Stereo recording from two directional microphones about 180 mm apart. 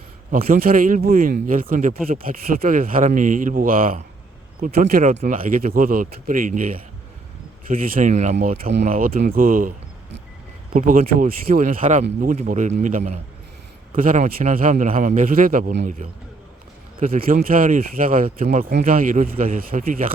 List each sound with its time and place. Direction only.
0.4 s speech: 50° right (ahead or behind)
7.7 s speech: 50° right (ahead or behind)
8.1 s speech: 40° right (ahead or behind)
10.8 s speech: 50° right (ahead or behind)
17.0 s speech: 50° right (ahead or behind)